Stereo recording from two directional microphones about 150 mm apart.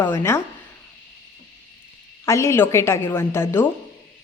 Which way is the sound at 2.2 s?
20° left (ahead or behind).